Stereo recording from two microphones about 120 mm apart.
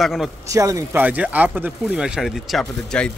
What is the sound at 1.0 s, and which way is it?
A man's voice, 10° right (ahead or behind).